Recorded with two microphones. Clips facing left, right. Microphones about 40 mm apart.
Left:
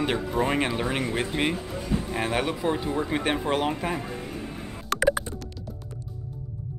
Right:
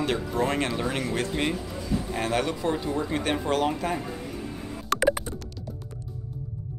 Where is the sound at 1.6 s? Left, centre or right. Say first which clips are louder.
Left 1 dB; left.